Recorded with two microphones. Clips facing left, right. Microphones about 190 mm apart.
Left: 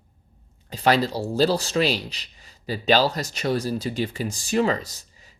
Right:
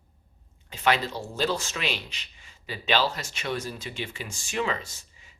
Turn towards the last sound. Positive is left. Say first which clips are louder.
# left 2 dB
turn(degrees=40)  # may be behind; listen again after turning